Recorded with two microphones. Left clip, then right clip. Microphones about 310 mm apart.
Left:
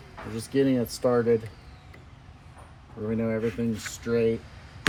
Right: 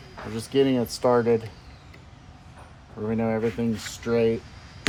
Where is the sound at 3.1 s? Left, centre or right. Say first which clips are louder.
Right 3 dB; centre.